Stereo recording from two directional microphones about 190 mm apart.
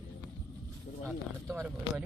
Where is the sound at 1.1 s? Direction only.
15° right (ahead or behind).